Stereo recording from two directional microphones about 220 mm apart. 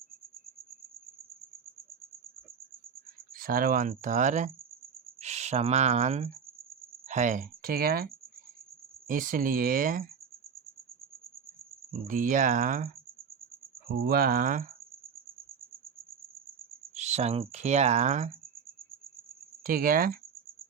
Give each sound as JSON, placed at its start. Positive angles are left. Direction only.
{"t": 3.3, "sound": "speech", "side_deg": -40}
{"t": 12.0, "sound": "speech", "side_deg": -35}
{"t": 16.9, "sound": "speech", "side_deg": -30}
{"t": 19.6, "sound": "speech", "side_deg": -40}